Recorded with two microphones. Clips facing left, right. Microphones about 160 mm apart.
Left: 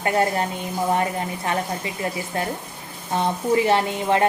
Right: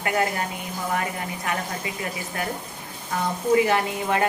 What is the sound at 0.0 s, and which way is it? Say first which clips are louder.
Speech: left 4 dB; 30° left (ahead or behind).